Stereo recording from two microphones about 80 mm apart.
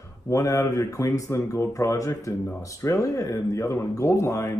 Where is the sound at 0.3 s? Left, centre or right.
Left.